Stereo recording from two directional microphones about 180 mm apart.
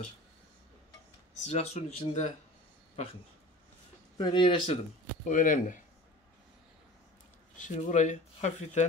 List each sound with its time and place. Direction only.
1.4 s speech: 35° left (ahead or behind)
4.2 s speech: 25° left (ahead or behind)
5.3 s speech: 45° left (ahead or behind)
7.5 s speech: 45° left (ahead or behind)